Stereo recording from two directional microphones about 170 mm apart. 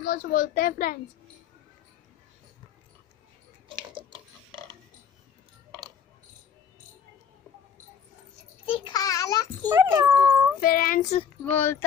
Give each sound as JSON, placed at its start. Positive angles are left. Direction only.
{"t": 0.0, "sound": "speech", "side_deg": 55}
{"t": 3.6, "sound": "a sound", "side_deg": -30}
{"t": 8.6, "sound": "a sound", "side_deg": 30}
{"t": 9.7, "sound": "speech", "side_deg": -15}
{"t": 10.6, "sound": "speech", "side_deg": 55}
{"t": 11.4, "sound": "speech", "side_deg": 10}